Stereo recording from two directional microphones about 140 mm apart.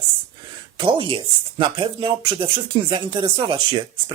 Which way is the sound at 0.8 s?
35° right (ahead or behind).